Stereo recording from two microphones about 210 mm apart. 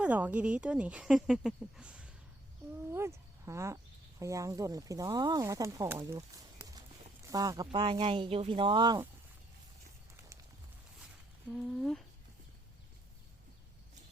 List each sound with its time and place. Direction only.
0.0 s speech: 5° right (ahead or behind)
11.5 s speech: centre (ahead or behind)